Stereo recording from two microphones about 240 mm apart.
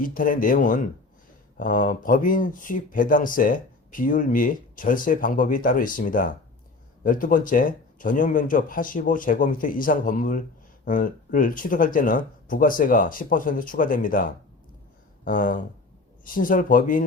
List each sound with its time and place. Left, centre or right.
0.0 s a man's voice: left